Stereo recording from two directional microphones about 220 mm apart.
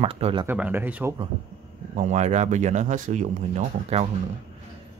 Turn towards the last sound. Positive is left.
turn(degrees=-30)  # may be behind; listen again after turning